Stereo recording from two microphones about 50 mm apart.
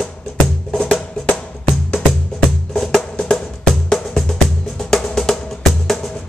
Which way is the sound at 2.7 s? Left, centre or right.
Centre.